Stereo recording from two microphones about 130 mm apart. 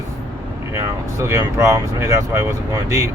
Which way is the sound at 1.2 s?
20° right (ahead or behind).